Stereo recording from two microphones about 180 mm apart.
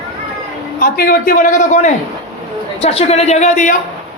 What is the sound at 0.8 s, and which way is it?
A man's voice, 50° left (ahead or behind).